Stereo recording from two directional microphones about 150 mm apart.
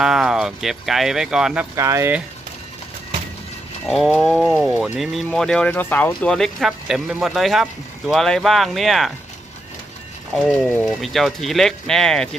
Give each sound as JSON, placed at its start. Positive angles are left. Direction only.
{"t": 0.0, "sound": "speech", "side_deg": -5}
{"t": 1.7, "sound": "speech", "side_deg": -20}
{"t": 3.8, "sound": "speech", "side_deg": 0}
{"t": 4.4, "sound": "speech", "side_deg": -10}
{"t": 4.8, "sound": "speech", "side_deg": 0}
{"t": 10.3, "sound": "speech", "side_deg": 0}